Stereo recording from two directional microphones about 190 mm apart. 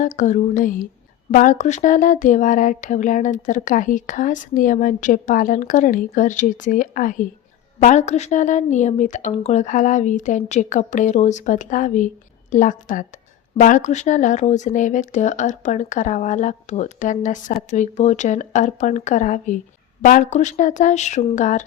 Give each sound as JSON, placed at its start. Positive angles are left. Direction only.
{"t": 0.0, "sound": "speech", "side_deg": 40}
{"t": 1.3, "sound": "a sound", "side_deg": 40}
{"t": 7.8, "sound": "speech", "side_deg": 40}